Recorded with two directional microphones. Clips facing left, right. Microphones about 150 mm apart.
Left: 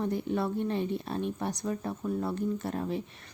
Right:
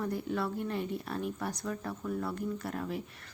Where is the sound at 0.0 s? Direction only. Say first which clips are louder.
Left 3 dB; 20° left (ahead or behind).